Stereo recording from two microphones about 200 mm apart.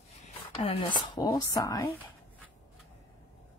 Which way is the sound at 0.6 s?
30° left (ahead or behind).